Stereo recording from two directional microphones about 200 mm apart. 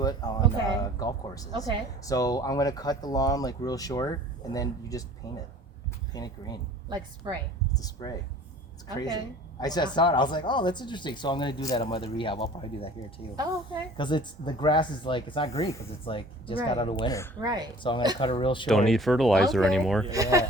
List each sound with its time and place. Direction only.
0.0 s speech: 20° left (ahead or behind)
7.2 s speech: 20° right (ahead or behind)
7.7 s speech: 20° left (ahead or behind)
9.6 s speech: 20° left (ahead or behind)
17.4 s speech: 20° right (ahead or behind)
18.2 s speech: 25° left (ahead or behind)
18.7 s speech: centre (ahead or behind)
20.1 s speech: 15° right (ahead or behind)